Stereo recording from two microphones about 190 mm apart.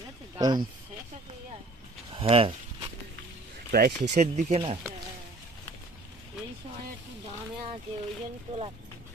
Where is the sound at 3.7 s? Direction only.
50° right (ahead or behind).